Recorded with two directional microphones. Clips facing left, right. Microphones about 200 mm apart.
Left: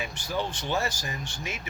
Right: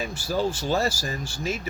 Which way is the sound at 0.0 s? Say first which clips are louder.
Right 4 dB; 40° right (ahead or behind).